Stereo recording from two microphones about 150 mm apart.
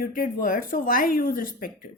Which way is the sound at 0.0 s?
65° left (ahead or behind).